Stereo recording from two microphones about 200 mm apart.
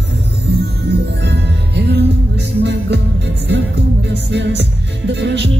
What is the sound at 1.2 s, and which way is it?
Music, 55° right (ahead or behind).